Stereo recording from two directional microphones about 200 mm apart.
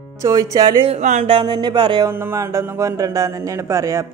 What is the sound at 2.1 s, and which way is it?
A man's voice, 10° right (ahead or behind).